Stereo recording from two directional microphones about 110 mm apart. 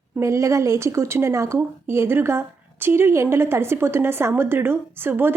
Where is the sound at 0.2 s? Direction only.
30° right (ahead or behind).